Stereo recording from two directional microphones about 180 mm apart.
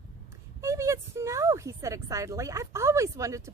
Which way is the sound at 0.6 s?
15° right (ahead or behind).